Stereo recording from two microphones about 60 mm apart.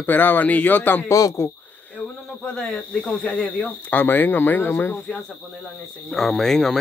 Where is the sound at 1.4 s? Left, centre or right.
Left.